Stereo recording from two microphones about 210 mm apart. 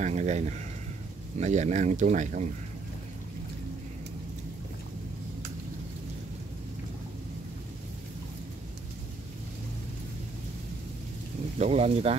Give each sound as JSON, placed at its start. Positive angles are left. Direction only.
{"t": 0.0, "sound": "speech", "side_deg": -35}
{"t": 11.5, "sound": "speech", "side_deg": -30}